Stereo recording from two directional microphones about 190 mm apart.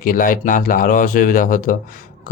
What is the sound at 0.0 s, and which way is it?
Speech, 45° left (ahead or behind).